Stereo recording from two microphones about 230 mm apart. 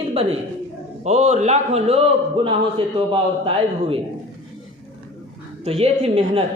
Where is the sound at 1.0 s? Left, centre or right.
Right.